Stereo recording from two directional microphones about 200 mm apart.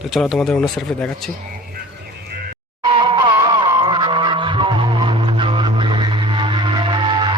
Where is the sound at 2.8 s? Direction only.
25° right (ahead or behind).